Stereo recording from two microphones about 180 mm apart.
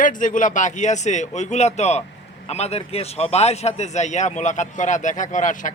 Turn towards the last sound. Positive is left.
turn(degrees=45)  # may be behind; listen again after turning